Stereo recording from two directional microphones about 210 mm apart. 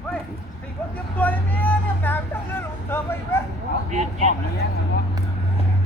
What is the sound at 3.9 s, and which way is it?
Speech, 35° right (ahead or behind).